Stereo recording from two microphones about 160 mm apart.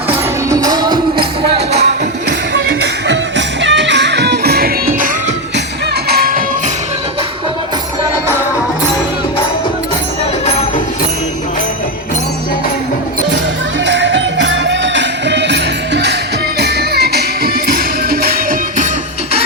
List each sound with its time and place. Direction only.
0.5 s music: 25° right (ahead or behind)
2.8 s music: 90° right; by 6.4 s 70° right (ahead or behind)
8.1 s music: 15° right (ahead or behind)
13.8 s music: 90° right; by 18.3 s 70° right (ahead or behind)